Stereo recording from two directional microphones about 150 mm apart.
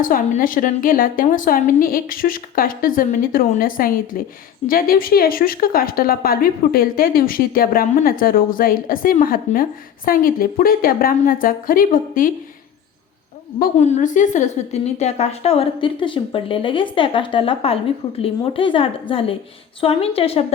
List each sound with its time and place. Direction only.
0.0 s a woman's voice: 65° left (ahead or behind)
13.7 s a woman's voice: 50° left (ahead or behind)